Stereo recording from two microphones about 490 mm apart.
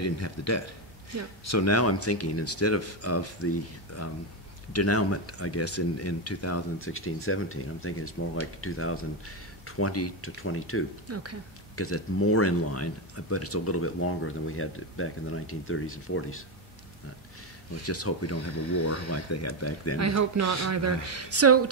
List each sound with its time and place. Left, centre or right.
0.0 s a man's voice: left
11.1 s speech: right
11.7 s speech: left
17.8 s speech: left
20.0 s speech: right